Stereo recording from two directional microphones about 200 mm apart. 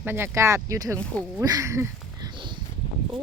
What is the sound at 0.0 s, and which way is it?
Speech, 10° right (ahead or behind).